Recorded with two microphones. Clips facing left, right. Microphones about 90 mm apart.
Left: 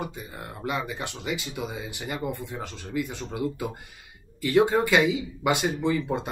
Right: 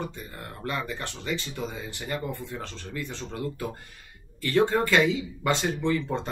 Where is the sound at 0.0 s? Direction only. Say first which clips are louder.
Left 1 dB; 15° left (ahead or behind).